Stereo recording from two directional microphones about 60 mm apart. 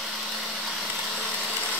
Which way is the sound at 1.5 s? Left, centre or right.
Left.